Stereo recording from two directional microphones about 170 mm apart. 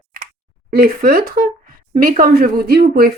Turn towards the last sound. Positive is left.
turn(degrees=-65)  # may be behind; listen again after turning